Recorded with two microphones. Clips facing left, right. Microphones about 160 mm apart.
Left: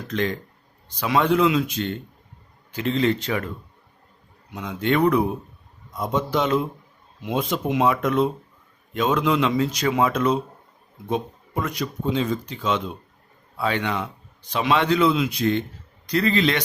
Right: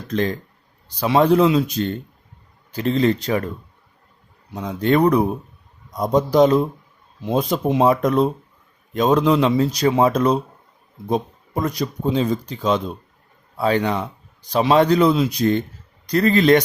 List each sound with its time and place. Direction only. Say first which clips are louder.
0.1 s a man's voice: right 4 dB; 35° right (ahead or behind)
4.5 s a man's voice: right 4 dB; 35° right (ahead or behind)